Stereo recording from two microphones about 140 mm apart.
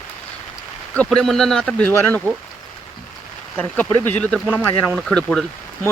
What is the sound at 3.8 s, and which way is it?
Speech, 15° left (ahead or behind).